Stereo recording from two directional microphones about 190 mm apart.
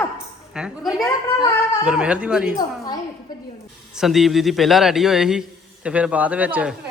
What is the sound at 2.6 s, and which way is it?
Speech, 20° left (ahead or behind).